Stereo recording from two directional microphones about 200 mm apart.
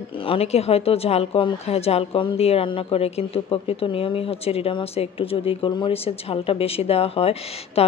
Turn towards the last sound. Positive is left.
turn(degrees=30)  # may be behind; listen again after turning